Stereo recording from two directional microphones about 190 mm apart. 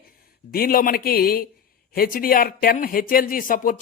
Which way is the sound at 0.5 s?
50° left (ahead or behind).